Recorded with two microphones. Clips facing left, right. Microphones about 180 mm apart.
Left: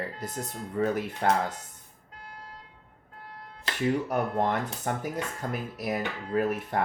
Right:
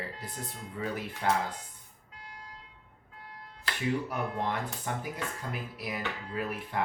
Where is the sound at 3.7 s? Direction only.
25° left (ahead or behind).